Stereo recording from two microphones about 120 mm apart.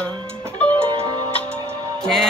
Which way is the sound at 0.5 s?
10° left (ahead or behind).